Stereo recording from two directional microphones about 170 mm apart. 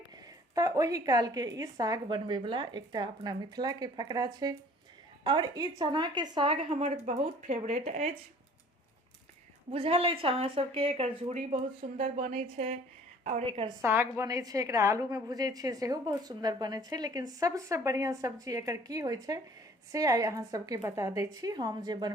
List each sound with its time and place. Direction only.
0.5 s a woman's voice: 20° right (ahead or behind); by 7.5 s 40° right (ahead or behind)
9.7 s speech: 35° right (ahead or behind)
11.9 s speech: 50° right (ahead or behind)
13.4 s speech: 30° right (ahead or behind)
13.8 s a woman's voice: 15° right (ahead or behind)